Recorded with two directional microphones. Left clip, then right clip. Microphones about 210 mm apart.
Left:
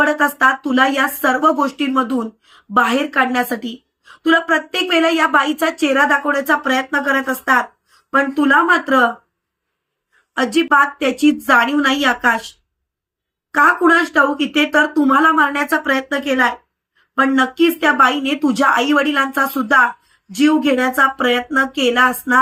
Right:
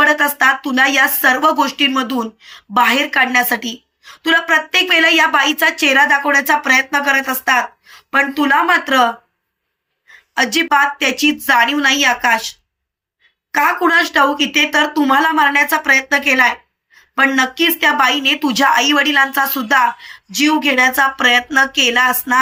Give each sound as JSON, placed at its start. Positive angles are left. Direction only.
{"t": 0.0, "sound": "a woman's voice", "side_deg": 5}
{"t": 10.3, "sound": "speech", "side_deg": 5}
{"t": 13.6, "sound": "a woman's voice", "side_deg": 5}